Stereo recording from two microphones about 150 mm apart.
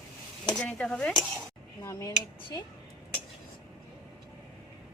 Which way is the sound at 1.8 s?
20° left (ahead or behind).